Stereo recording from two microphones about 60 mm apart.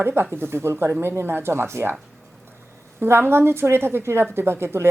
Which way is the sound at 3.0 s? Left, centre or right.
Right.